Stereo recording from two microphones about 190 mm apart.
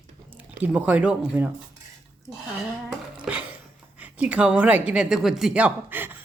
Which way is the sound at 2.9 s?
5° right (ahead or behind).